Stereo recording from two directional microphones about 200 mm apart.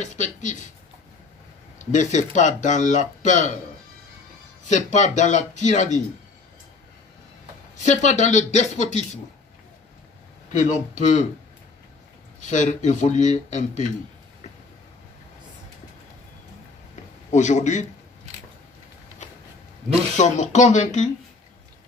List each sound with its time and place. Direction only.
0.0 s speech: 35° left (ahead or behind)
1.8 s speech: 35° left (ahead or behind)
4.6 s speech: 35° left (ahead or behind)
7.8 s speech: 35° left (ahead or behind)
10.6 s speech: 35° left (ahead or behind)
12.4 s speech: 35° left (ahead or behind)
16.9 s a sound: 35° left (ahead or behind)
20.2 s speech: 35° left (ahead or behind)